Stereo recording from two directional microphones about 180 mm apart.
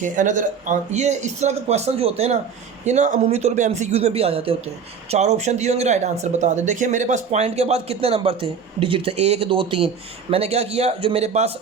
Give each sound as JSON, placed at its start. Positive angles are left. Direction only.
{"t": 0.0, "sound": "speech", "side_deg": -45}